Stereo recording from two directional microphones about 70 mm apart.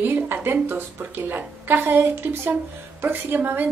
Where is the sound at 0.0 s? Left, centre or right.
Right.